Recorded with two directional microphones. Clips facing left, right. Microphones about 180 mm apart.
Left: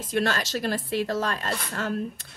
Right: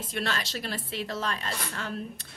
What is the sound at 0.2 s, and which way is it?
A woman's voice, 45° left (ahead or behind).